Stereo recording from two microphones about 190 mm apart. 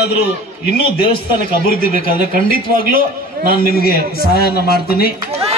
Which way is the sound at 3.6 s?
50° left (ahead or behind).